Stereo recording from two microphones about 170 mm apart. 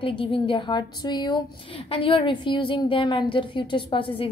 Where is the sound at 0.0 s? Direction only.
30° left (ahead or behind).